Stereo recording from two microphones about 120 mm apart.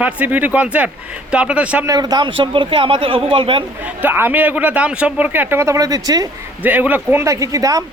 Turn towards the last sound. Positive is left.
turn(degrees=-30)  # may be behind; listen again after turning